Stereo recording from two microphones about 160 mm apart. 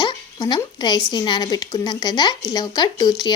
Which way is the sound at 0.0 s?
25° left (ahead or behind).